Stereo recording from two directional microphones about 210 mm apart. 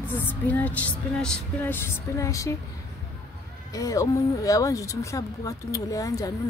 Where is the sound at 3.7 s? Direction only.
15° left (ahead or behind).